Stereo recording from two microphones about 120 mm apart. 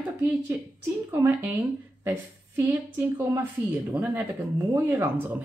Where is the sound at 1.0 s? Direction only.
15° right (ahead or behind).